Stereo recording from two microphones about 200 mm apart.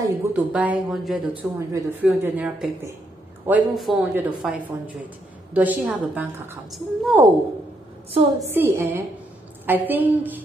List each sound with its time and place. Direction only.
0.0 s speech: 5° right (ahead or behind)
1.3 s speech: 15° right (ahead or behind)
2.0 s a man's voice: 5° right (ahead or behind)
8.4 s speech: 10° right (ahead or behind)